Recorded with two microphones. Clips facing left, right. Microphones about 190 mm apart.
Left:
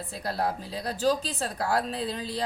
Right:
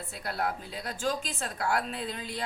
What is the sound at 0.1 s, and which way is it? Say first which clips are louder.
Speech: left 3 dB; 35° left (ahead or behind).